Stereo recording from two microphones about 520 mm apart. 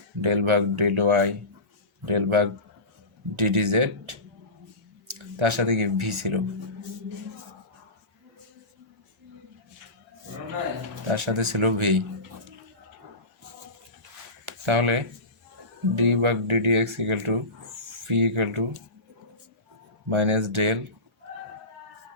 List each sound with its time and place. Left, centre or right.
0.2 s speech: right
11.1 s speech: right
14.4 s a sound: right
16.0 s speech: right
20.1 s speech: right